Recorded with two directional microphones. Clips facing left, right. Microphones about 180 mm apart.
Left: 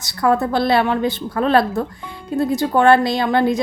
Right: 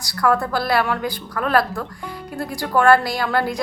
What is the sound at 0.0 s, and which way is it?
Speech, 25° left (ahead or behind).